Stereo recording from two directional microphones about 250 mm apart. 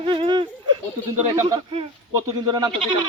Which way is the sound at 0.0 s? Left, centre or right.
Right.